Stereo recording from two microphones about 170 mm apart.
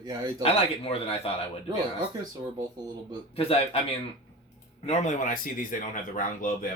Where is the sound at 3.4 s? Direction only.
35° left (ahead or behind).